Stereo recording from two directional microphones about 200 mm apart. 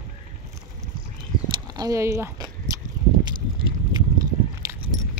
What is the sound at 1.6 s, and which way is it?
Speech, 20° right (ahead or behind).